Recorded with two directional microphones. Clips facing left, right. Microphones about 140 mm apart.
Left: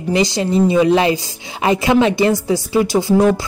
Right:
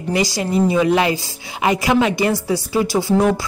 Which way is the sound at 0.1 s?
25° left (ahead or behind).